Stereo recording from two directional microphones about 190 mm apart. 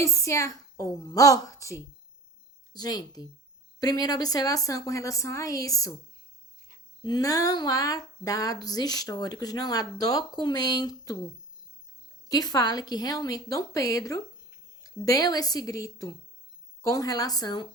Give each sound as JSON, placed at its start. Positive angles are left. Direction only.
{"t": 0.0, "sound": "speech", "side_deg": 15}
{"t": 12.3, "sound": "speech", "side_deg": 20}